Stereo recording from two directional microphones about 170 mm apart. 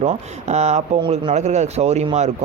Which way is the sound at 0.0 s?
40° right (ahead or behind).